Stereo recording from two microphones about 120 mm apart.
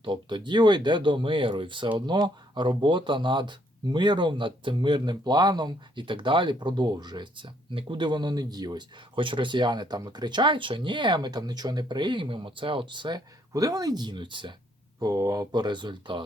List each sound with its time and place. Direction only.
0.0 s speech: 40° right (ahead or behind)
14.9 s speech: 30° right (ahead or behind)